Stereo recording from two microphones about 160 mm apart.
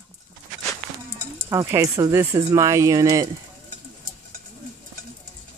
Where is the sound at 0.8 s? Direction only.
55° right (ahead or behind).